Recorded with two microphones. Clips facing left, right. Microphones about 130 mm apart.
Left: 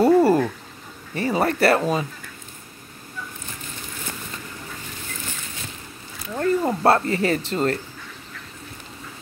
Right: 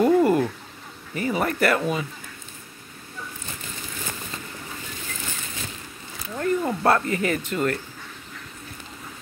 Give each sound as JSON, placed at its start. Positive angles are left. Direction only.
{"t": 0.0, "sound": "a sound", "side_deg": 35}
{"t": 1.1, "sound": "speech", "side_deg": 35}
{"t": 6.3, "sound": "speech", "side_deg": 30}